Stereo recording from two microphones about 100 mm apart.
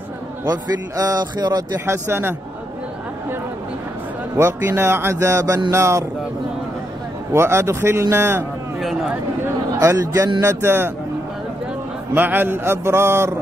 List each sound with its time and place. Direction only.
0.5 s a man's voice: 40° right (ahead or behind)
1.9 s speech: 25° right (ahead or behind)
4.4 s speech: 25° right (ahead or behind)
7.3 s speech: 25° right (ahead or behind)
9.8 s a man's voice: 30° right (ahead or behind)
12.1 s speech: 20° right (ahead or behind)